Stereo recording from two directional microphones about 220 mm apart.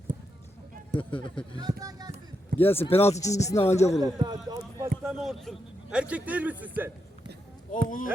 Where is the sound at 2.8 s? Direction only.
25° left (ahead or behind).